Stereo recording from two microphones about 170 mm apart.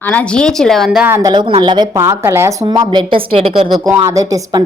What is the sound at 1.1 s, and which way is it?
Speech, 25° right (ahead or behind).